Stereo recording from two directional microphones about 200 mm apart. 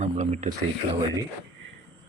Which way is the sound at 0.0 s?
35° right (ahead or behind).